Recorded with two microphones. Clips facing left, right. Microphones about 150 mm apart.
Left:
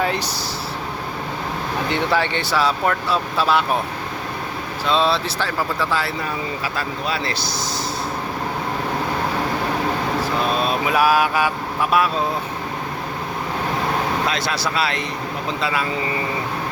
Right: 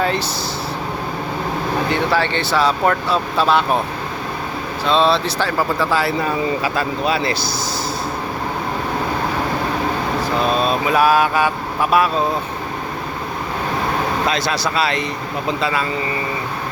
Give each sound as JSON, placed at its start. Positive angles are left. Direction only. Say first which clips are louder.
{"t": 1.9, "sound": "speech", "louder": "even", "side_deg": 15}
{"t": 4.9, "sound": "speech", "louder": "right 3 dB", "side_deg": 5}
{"t": 10.6, "sound": "vehicle", "louder": "right 2 dB", "side_deg": 10}
{"t": 14.3, "sound": "speech", "louder": "right 3 dB", "side_deg": 0}